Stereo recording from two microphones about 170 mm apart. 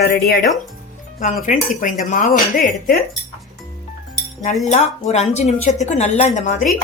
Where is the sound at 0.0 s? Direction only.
65° left (ahead or behind).